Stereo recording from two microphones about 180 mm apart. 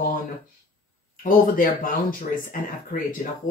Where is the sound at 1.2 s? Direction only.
50° left (ahead or behind).